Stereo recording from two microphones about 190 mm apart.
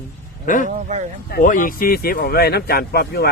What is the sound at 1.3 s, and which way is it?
Speech, 45° left (ahead or behind).